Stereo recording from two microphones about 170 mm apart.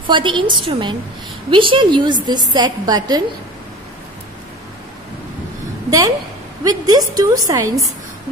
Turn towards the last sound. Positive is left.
turn(degrees=-20)  # may be behind; listen again after turning